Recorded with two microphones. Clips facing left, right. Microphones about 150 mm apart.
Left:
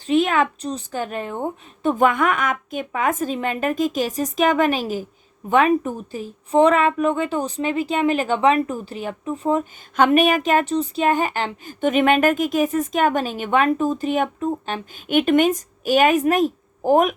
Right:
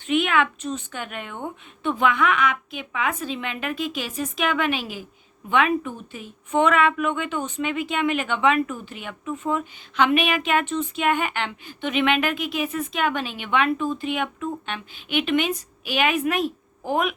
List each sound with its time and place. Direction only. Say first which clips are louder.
0.1 s a woman's voice: left 3 dB; 35° left (ahead or behind)